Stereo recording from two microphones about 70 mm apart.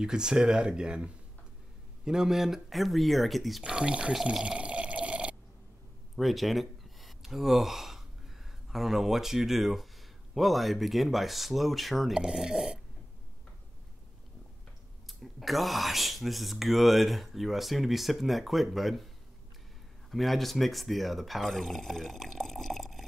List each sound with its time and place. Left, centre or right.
0.0 s speech: centre
3.6 s speech: centre
4.1 s water: centre
6.1 s speech: centre
12.2 s speech: centre
15.0 s speech: centre
20.1 s speech: centre